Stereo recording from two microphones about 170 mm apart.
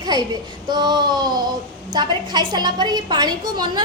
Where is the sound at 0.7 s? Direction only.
25° right (ahead or behind).